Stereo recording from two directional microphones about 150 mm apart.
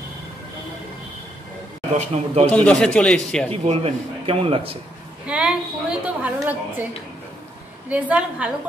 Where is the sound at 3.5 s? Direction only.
40° right (ahead or behind).